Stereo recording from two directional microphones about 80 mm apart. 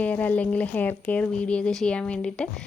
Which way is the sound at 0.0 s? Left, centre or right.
Centre.